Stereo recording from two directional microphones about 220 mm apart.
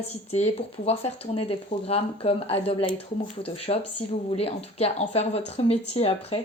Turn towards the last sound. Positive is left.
turn(degrees=25)  # may be behind; listen again after turning